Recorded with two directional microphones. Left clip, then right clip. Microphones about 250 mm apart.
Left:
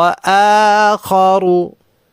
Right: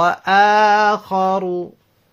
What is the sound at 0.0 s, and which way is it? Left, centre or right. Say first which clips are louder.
Speech: left 3 dB; left.